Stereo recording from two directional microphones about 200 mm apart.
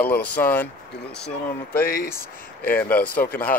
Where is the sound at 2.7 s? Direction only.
5° left (ahead or behind).